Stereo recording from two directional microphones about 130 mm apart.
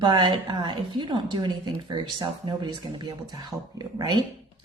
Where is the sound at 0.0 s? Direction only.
40° right (ahead or behind).